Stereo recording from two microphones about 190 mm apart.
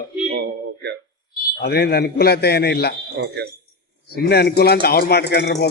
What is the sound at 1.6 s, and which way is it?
A man's voice, 55° left (ahead or behind).